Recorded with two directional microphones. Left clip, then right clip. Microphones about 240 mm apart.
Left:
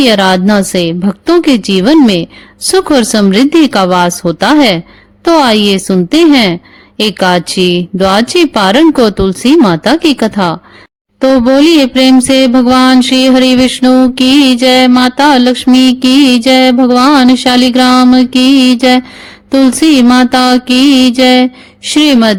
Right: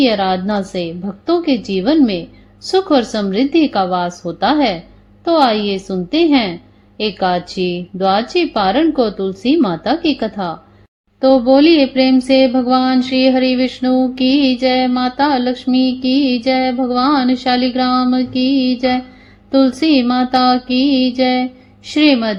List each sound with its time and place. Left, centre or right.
0.0 s a woman's voice: left
5.2 s mantra: left